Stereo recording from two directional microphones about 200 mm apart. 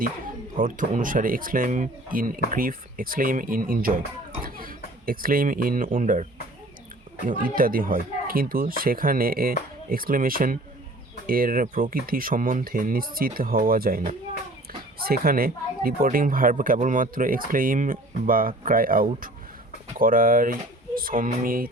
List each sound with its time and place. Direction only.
0.6 s speech: 40° right (ahead or behind)
7.3 s speech: 45° right (ahead or behind)